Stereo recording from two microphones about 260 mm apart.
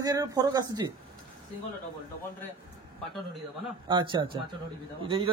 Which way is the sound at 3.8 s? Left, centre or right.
Centre.